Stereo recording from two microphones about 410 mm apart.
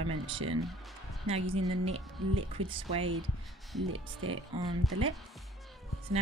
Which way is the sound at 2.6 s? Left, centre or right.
Centre.